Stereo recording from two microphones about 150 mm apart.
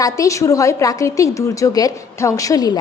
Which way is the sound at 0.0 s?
20° left (ahead or behind).